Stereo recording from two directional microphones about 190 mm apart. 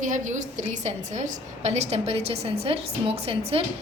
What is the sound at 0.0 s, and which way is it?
A woman's voice, 40° right (ahead or behind).